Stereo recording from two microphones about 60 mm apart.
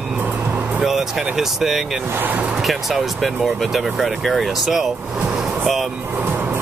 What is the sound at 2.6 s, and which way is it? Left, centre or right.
Speech, centre.